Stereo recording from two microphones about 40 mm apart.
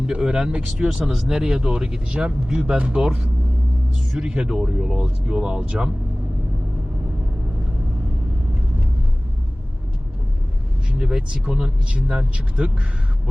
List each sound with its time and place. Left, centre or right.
0.2 s speech: centre
3.0 s speech: centre
10.9 s speech: right